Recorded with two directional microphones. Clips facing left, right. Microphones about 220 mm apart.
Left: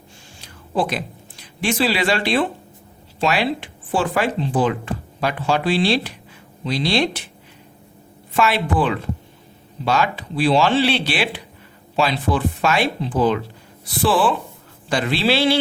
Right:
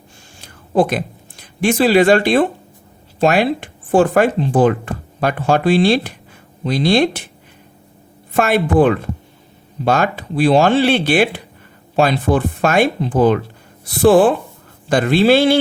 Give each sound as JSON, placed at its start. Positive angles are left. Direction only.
{"t": 0.4, "sound": "speech", "side_deg": -50}
{"t": 8.3, "sound": "speech", "side_deg": -50}